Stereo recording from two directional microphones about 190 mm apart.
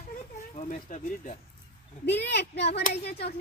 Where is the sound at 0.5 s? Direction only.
40° left (ahead or behind).